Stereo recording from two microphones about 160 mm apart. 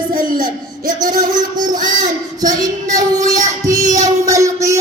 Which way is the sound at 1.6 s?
55° right (ahead or behind).